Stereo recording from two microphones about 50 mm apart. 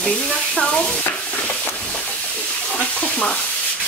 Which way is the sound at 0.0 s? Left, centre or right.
Centre.